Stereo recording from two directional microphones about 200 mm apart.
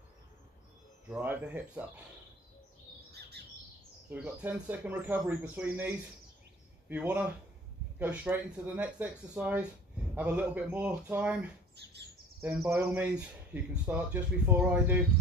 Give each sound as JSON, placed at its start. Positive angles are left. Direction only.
{"t": 1.1, "sound": "speech", "side_deg": -5}
{"t": 3.1, "sound": "bird", "side_deg": -55}
{"t": 4.1, "sound": "speech", "side_deg": -10}
{"t": 11.7, "sound": "chirp", "side_deg": -55}
{"t": 12.4, "sound": "speech", "side_deg": -5}